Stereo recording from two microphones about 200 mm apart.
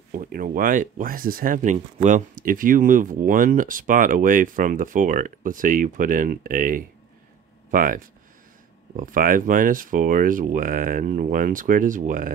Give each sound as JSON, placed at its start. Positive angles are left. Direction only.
{"t": 0.1, "sound": "speech", "side_deg": -45}